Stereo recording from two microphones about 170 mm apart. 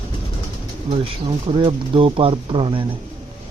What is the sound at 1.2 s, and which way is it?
Speech, 30° right (ahead or behind).